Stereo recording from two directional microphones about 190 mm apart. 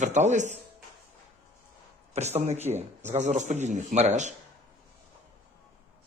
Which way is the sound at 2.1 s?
35° right (ahead or behind).